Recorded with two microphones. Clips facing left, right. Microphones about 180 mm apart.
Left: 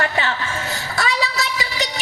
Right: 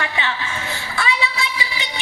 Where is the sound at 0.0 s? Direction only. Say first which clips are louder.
Left 3 dB; 40° left (ahead or behind).